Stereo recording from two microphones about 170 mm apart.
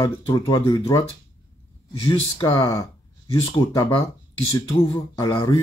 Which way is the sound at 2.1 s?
25° left (ahead or behind).